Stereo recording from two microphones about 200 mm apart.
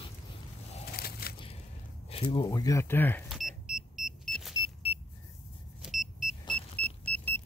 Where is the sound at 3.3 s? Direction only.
Centre (ahead or behind).